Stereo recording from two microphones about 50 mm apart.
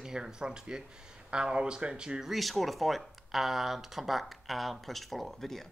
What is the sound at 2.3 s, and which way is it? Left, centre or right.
Speech, centre.